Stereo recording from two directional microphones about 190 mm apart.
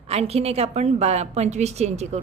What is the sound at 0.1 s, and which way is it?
A woman's voice, 35° right (ahead or behind).